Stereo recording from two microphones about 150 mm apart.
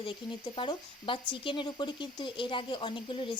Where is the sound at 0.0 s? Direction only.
35° left (ahead or behind).